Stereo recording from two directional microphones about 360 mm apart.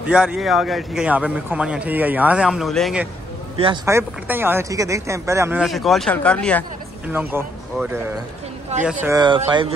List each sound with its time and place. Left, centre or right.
0.0 s a man's voice: centre
3.5 s a man's voice: centre
8.7 s speech: centre